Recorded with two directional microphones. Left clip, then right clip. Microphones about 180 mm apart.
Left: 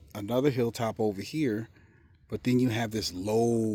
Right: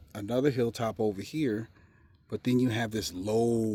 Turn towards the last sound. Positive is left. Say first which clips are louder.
# left 1 dB
turn(degrees=20)  # may be behind; listen again after turning